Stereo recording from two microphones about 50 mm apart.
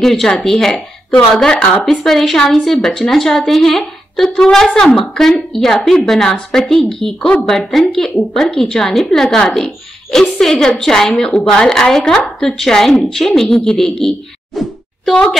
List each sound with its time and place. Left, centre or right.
0.0 s a woman's voice: centre
1.5 s a woman's voice: centre
6.3 s a woman's voice: left
6.7 s a woman's voice: centre
7.2 s a woman's voice: left
7.4 s a woman's voice: centre
8.5 s a woman's voice: centre
8.8 s a woman's voice: centre
14.5 s a sound: centre